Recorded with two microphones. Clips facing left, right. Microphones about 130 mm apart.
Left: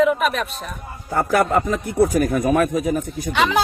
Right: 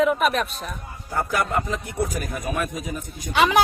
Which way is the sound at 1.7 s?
55° left (ahead or behind).